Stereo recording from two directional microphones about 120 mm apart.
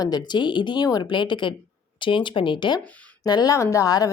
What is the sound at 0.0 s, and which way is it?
A woman's voice, 35° left (ahead or behind).